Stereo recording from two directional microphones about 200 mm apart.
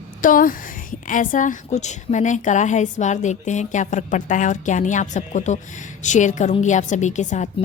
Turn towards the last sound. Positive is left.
turn(degrees=35)  # may be behind; listen again after turning